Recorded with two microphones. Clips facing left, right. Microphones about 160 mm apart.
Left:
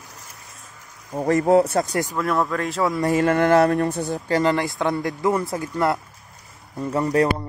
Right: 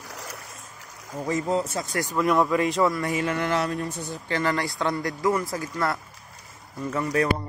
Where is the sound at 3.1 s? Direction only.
50° left (ahead or behind).